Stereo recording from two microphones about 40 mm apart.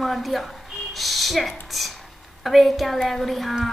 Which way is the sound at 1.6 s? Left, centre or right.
Centre.